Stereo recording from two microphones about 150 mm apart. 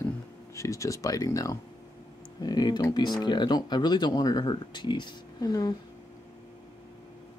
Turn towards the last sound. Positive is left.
turn(degrees=25)  # may be behind; listen again after turning